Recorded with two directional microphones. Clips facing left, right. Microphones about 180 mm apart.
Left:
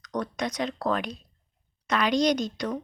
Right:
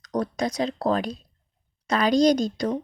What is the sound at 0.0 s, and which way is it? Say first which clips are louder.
Speech: right 4 dB; 30° right (ahead or behind).